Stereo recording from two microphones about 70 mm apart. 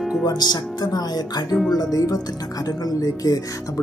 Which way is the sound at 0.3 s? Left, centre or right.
Left.